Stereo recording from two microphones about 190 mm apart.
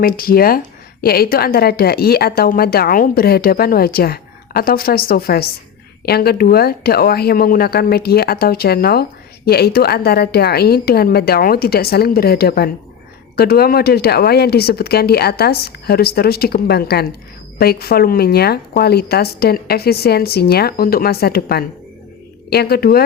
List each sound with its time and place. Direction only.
0.0 s a woman's voice: 50° left (ahead or behind)